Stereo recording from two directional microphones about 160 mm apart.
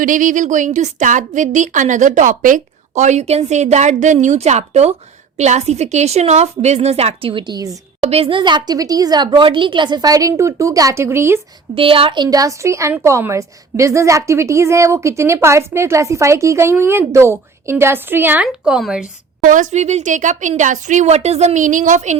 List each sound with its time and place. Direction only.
0.0 s a woman's voice: 55° right (ahead or behind); by 7.8 s 25° right (ahead or behind)
8.0 s speech: 35° right (ahead or behind); by 11.3 s 15° right (ahead or behind)
11.7 s a woman's voice: 35° right (ahead or behind); by 19.0 s 5° right (ahead or behind)
19.4 s a woman's voice: 55° right (ahead or behind)